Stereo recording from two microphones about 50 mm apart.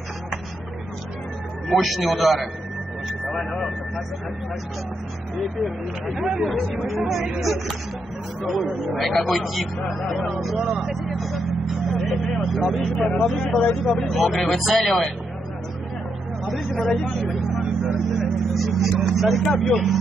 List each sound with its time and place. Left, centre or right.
1.7 s speech: centre
3.3 s vehicle: centre
5.4 s speech: centre
10.7 s vehicle: centre
12.4 s speech: centre
13.3 s speech: centre
13.7 s speech: centre
16.4 s a sound: centre
16.9 s speech: centre
17.9 s vehicle: centre